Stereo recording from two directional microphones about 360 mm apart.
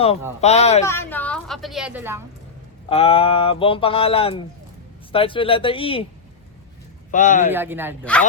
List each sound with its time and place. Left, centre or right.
0.4 s speech: centre
0.9 s a woman's voice: centre
2.9 s speech: centre
7.1 s speech: left
7.5 s a woman's voice: centre